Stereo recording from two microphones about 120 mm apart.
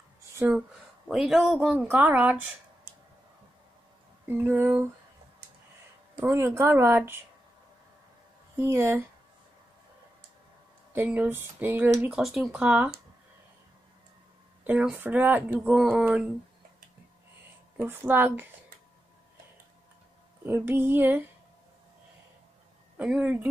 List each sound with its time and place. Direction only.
0.5 s speech: 5° right (ahead or behind)
4.3 s speech: 20° right (ahead or behind)
6.1 s speech: 20° right (ahead or behind)
8.5 s speech: 20° right (ahead or behind)
10.9 s speech: 15° right (ahead or behind)
12.1 s speech: centre (ahead or behind)
14.7 s speech: 10° right (ahead or behind)
15.7 s speech: centre (ahead or behind)
17.7 s speech: 15° right (ahead or behind)
20.4 s speech: 15° right (ahead or behind)
22.9 s speech: 10° right (ahead or behind)